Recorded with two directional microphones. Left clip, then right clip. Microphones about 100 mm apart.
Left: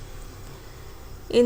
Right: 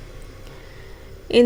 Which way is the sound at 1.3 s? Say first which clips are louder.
Right 4 dB; 25° right (ahead or behind).